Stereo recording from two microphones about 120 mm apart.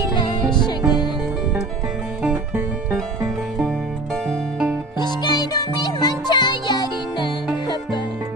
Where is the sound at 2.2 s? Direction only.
10° right (ahead or behind).